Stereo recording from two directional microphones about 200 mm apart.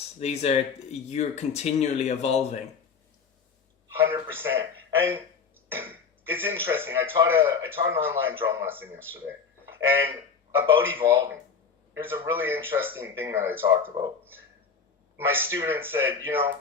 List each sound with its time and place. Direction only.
0.2 s speech: 30° left (ahead or behind)
4.1 s speech: 10° right (ahead or behind)
15.3 s speech: 10° right (ahead or behind)